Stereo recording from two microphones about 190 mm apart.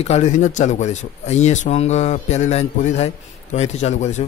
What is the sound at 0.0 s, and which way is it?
Speech, 35° left (ahead or behind).